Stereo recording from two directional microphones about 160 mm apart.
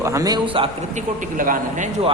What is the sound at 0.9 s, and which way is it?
Speech, 55° right (ahead or behind).